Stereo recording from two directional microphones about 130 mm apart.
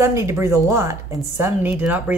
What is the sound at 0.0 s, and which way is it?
Speech, 20° right (ahead or behind).